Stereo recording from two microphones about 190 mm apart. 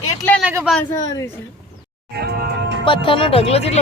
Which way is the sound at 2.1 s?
60° right (ahead or behind).